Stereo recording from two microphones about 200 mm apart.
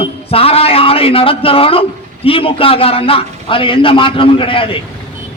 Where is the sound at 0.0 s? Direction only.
30° left (ahead or behind).